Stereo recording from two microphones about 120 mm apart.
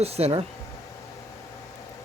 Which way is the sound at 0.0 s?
60° right (ahead or behind).